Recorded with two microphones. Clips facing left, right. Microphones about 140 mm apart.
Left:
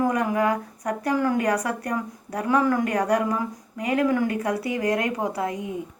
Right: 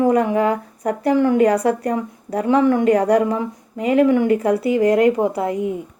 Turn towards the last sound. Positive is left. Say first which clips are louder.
# right 8 dB
turn(degrees=-30)  # may be behind; listen again after turning